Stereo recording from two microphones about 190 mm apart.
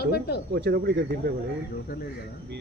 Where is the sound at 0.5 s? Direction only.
60° right (ahead or behind).